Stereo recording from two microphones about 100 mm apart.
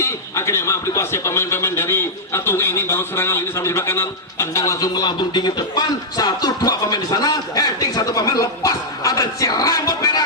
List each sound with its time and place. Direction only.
0.0 s a man's voice: 30° left (ahead or behind)